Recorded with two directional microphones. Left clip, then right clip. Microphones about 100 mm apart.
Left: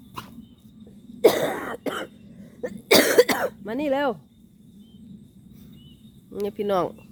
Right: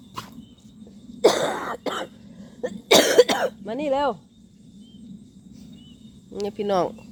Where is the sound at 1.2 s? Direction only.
55° left (ahead or behind).